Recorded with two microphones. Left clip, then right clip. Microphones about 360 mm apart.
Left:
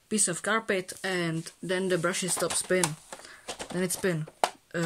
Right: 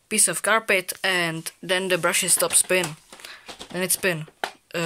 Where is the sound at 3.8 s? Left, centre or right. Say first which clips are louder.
Right 6 dB; centre.